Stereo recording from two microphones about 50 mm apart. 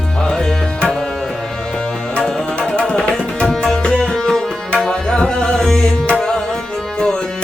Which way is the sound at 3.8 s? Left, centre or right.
Centre.